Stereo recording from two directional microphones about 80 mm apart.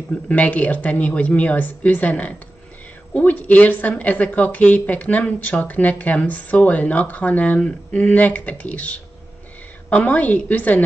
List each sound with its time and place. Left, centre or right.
0.3 s speech: centre